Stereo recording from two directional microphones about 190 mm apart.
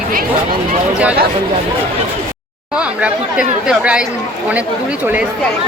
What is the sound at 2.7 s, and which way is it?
Speech, 5° right (ahead or behind).